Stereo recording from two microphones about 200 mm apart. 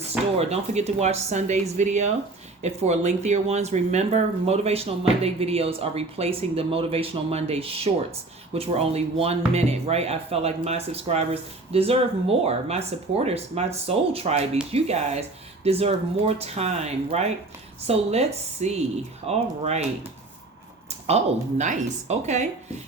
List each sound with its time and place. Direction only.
0.3 s speech: 30° right (ahead or behind)
21.6 s speech: 35° right (ahead or behind)